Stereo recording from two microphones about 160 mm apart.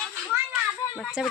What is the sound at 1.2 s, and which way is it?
Speech, 5° right (ahead or behind).